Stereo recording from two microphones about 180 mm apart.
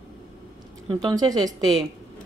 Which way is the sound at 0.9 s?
25° right (ahead or behind).